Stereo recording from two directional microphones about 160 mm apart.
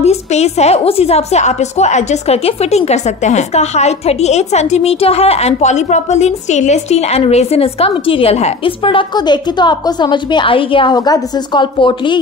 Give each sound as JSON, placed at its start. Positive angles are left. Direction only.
{"t": 0.0, "sound": "a woman's voice", "side_deg": 40}